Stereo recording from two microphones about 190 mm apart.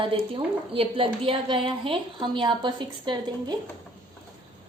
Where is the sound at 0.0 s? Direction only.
25° right (ahead or behind).